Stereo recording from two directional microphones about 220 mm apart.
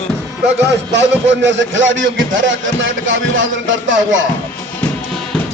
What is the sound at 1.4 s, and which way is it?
A man's voice, 55° right (ahead or behind).